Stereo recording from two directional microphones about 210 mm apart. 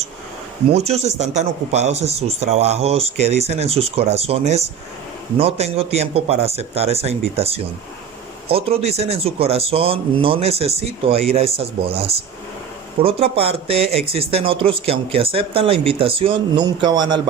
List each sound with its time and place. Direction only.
0.7 s speech: 30° right (ahead or behind)
13.0 s speech: 25° right (ahead or behind)